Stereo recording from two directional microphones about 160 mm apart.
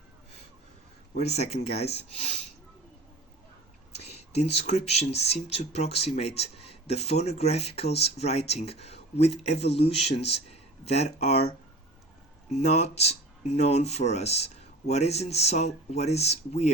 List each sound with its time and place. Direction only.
1.4 s speech: 40° left (ahead or behind)
4.0 s speech: 40° left (ahead or behind)